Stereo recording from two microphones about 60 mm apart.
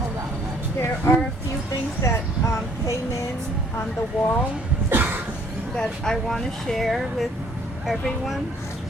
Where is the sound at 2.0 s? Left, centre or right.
Left.